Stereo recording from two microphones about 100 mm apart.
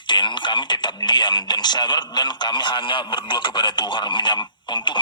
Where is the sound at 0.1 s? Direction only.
50° left (ahead or behind).